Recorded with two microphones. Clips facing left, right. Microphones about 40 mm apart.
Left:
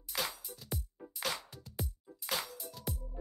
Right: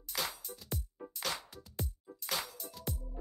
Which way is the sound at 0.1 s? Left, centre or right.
Centre.